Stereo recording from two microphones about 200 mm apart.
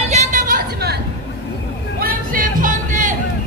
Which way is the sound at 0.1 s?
35° right (ahead or behind).